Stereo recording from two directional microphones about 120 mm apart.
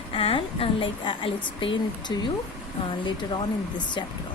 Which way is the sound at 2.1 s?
35° left (ahead or behind).